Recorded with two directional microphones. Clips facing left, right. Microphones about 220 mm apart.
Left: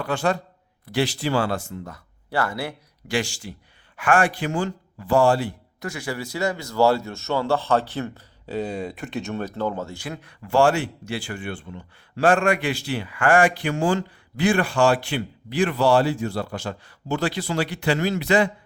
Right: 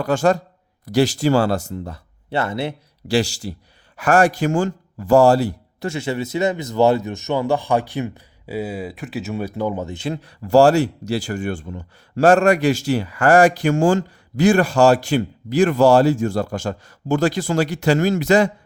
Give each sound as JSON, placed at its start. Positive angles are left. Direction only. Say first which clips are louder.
{"t": 0.0, "sound": "speech", "louder": "right 6 dB", "side_deg": -45}
{"t": 3.1, "sound": "speech", "louder": "right 6 dB", "side_deg": -35}
{"t": 5.9, "sound": "speech", "louder": "right 7 dB", "side_deg": -25}